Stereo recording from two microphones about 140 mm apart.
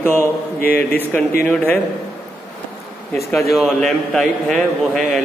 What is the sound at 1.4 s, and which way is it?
Speech, 5° left (ahead or behind).